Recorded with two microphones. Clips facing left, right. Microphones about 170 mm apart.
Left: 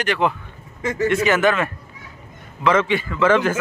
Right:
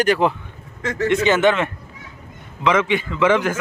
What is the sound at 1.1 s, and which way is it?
A man's voice, 25° right (ahead or behind).